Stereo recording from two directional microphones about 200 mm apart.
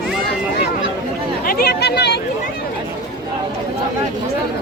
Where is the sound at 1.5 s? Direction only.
50° left (ahead or behind).